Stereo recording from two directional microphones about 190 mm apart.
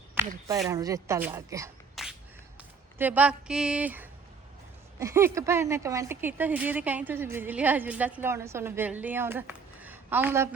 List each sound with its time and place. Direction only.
0.1 s speech: 15° right (ahead or behind)
2.0 s a sound: centre (ahead or behind)
3.0 s speech: 10° right (ahead or behind)